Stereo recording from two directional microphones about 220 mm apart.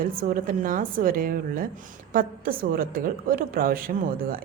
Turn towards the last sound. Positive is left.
turn(degrees=-40)  # may be behind; listen again after turning